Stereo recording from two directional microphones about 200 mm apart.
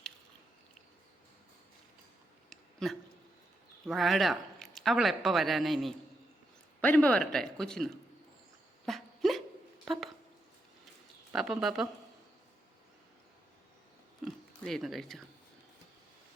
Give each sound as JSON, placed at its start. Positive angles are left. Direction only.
{"t": 2.5, "sound": "a sound", "side_deg": 0}
{"t": 3.8, "sound": "speech", "side_deg": 0}
{"t": 8.9, "sound": "dog", "side_deg": 0}
{"t": 9.8, "sound": "speech", "side_deg": 0}
{"t": 11.3, "sound": "speech", "side_deg": -5}
{"t": 14.3, "sound": "a sound", "side_deg": 0}